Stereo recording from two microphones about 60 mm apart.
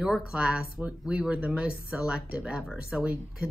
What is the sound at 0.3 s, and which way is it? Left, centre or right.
A woman's voice, centre.